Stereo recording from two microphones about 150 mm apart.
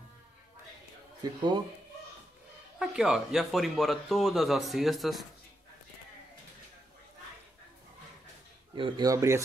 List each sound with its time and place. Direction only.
1.2 s speech: 25° right (ahead or behind)
2.8 s speech: 5° right (ahead or behind)
8.7 s speech: 30° right (ahead or behind)